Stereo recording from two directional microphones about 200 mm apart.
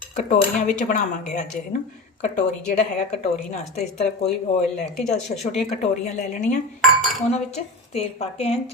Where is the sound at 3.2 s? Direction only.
35° left (ahead or behind).